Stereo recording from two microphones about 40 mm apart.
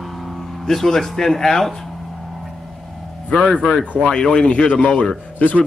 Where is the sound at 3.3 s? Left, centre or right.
Left.